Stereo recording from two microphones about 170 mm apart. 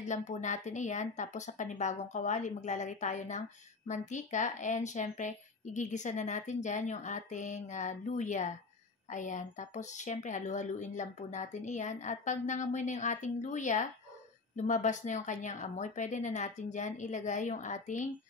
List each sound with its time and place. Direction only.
0.0 s speech: 45° left (ahead or behind)